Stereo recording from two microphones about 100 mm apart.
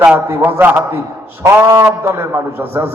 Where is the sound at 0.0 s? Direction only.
15° right (ahead or behind).